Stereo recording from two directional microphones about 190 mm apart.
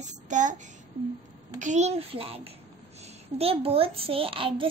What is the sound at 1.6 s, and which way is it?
A child's voice, 40° right (ahead or behind).